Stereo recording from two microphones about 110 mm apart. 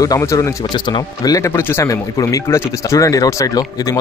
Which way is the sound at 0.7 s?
40° left (ahead or behind).